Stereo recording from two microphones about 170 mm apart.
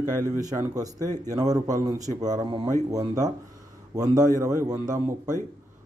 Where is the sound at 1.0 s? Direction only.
15° left (ahead or behind).